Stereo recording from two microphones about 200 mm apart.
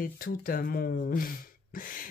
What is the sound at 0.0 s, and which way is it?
Speech, 45° left (ahead or behind).